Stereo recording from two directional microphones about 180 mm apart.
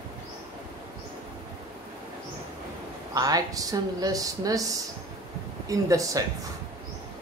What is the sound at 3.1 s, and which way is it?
Speech, 20° right (ahead or behind).